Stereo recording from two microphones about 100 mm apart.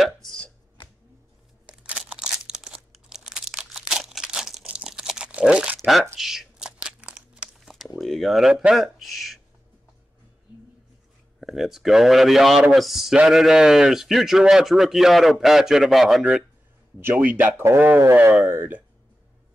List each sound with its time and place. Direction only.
0.0 s chopping: 5° left (ahead or behind)
1.8 s crumpling: 10° right (ahead or behind)
5.8 s a sound: centre (ahead or behind)
6.1 s crumpling: 5° right (ahead or behind)
8.0 s speech: centre (ahead or behind)
11.3 s a man's voice: centre (ahead or behind)
17.0 s a man's voice: 15° right (ahead or behind)